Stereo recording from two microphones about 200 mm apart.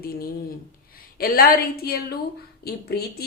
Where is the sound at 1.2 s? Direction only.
45° left (ahead or behind).